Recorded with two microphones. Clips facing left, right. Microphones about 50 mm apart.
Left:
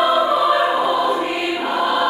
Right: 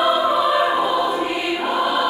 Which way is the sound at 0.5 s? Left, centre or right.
Centre.